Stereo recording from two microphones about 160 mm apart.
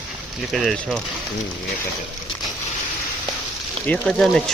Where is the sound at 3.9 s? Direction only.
5° left (ahead or behind).